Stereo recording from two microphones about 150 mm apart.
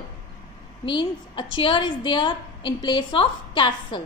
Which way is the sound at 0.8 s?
35° left (ahead or behind).